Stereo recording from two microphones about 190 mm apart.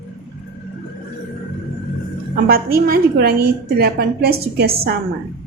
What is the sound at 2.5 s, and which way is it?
A woman's voice, 50° right (ahead or behind).